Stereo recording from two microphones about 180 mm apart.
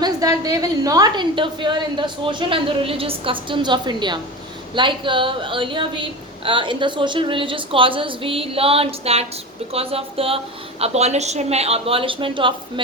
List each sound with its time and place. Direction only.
0.0 s a woman's voice: 20° right (ahead or behind)